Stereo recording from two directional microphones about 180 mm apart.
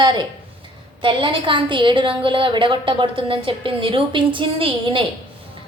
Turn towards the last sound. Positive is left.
turn(degrees=-25)  # may be behind; listen again after turning